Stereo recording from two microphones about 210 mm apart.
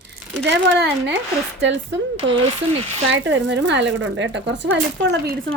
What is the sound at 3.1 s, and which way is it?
Speech, 60° right (ahead or behind).